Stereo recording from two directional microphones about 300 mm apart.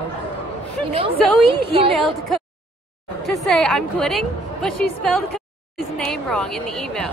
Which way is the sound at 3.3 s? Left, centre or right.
Centre.